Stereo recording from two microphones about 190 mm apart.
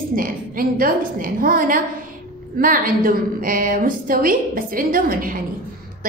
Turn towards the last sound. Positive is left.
turn(degrees=-45)  # may be behind; listen again after turning